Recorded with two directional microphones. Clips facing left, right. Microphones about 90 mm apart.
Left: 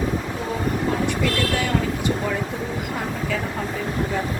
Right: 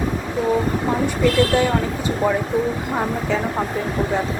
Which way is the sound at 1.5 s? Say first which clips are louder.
Right 7 dB; 30° right (ahead or behind).